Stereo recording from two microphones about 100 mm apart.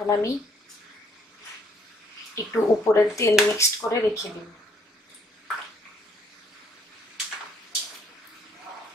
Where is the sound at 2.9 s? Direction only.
30° left (ahead or behind).